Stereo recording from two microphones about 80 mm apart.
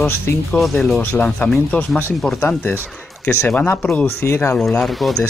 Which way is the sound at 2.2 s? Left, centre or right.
Centre.